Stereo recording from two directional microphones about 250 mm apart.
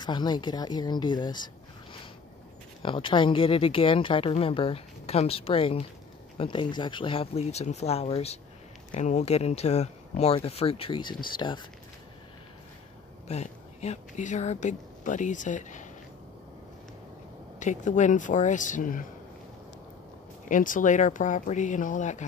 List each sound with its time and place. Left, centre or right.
0.0 s a woman's voice: centre
2.8 s speech: centre
13.3 s speech: left
17.6 s speech: left
20.4 s speech: left